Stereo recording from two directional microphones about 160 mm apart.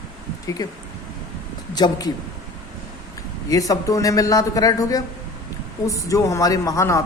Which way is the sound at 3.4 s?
20° left (ahead or behind).